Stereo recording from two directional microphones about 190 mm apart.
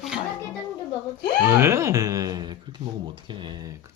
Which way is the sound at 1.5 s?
15° right (ahead or behind).